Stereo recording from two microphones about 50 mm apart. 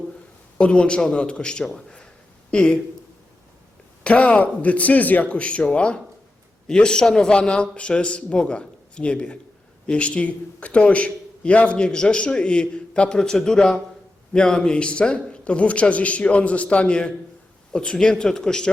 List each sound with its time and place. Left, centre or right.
0.6 s a man's voice: left
4.0 s a man's voice: left